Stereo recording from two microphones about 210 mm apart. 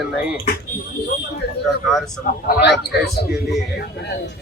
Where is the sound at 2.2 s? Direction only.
55° left (ahead or behind).